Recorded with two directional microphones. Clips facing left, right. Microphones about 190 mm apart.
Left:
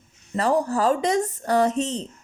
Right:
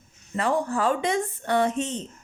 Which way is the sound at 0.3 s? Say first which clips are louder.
Left 3 dB; 40° left (ahead or behind).